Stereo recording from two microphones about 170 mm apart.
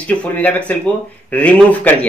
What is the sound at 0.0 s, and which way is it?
Speech, 10° left (ahead or behind).